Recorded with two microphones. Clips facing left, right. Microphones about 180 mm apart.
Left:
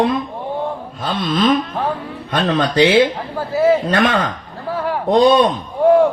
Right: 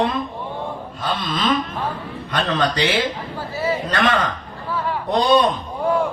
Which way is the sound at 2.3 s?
45° left (ahead or behind).